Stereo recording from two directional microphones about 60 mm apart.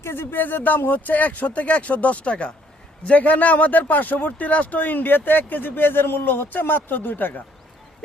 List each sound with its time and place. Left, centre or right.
0.0 s speech: left